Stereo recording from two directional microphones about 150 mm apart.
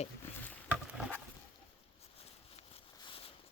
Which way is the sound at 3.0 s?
35° left (ahead or behind).